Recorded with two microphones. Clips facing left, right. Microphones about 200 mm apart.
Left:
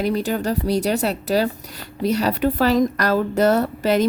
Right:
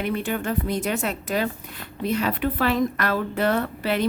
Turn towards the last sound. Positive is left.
turn(degrees=40)  # may be behind; listen again after turning